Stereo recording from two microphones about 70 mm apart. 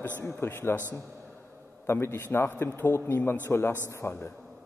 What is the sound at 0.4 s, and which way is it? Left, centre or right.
A man's voice, left.